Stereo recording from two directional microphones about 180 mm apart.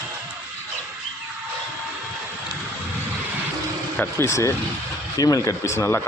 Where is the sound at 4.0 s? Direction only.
15° left (ahead or behind).